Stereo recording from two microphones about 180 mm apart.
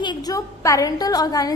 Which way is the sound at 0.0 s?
25° left (ahead or behind).